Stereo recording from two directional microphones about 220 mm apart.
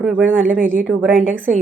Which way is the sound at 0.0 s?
5° right (ahead or behind).